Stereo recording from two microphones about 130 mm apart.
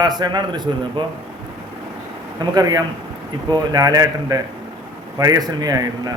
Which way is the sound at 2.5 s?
30° right (ahead or behind).